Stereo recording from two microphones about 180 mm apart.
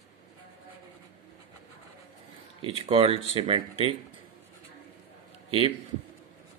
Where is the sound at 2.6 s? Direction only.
30° right (ahead or behind).